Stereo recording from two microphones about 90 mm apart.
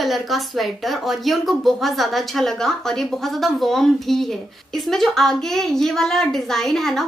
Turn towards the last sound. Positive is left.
turn(degrees=5)  # may be behind; listen again after turning